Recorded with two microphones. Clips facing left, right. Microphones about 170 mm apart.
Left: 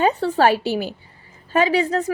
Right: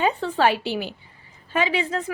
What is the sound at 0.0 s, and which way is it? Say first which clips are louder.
A woman's voice: left 4 dB; 40° left (ahead or behind).